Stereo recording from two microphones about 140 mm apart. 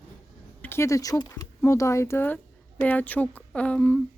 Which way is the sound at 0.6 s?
20° left (ahead or behind).